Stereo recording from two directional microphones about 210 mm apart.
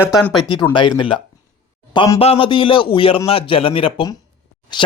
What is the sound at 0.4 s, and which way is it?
Speech, 20° left (ahead or behind).